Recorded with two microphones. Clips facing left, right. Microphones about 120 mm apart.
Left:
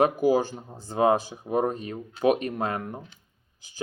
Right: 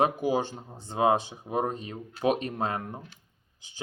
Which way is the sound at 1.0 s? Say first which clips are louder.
Left 2 dB; 25° right (ahead or behind).